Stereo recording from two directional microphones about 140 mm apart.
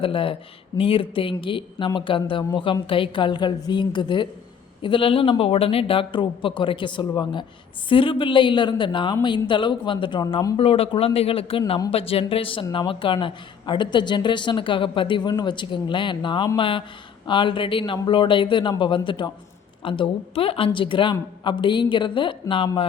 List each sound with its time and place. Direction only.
0.0 s a woman's voice: 40° left (ahead or behind)
10.6 s a man's voice: 45° left (ahead or behind)